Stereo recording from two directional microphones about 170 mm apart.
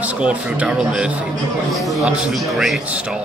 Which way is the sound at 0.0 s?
5° right (ahead or behind).